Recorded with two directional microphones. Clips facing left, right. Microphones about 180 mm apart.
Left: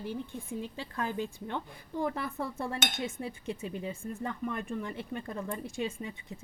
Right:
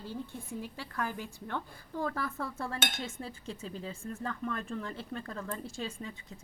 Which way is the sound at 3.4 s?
60° left (ahead or behind).